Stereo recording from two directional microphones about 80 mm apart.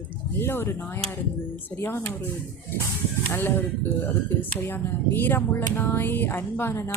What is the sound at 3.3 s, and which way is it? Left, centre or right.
Speech, left.